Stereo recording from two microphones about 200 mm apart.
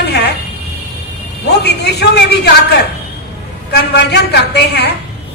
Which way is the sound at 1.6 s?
55° left (ahead or behind).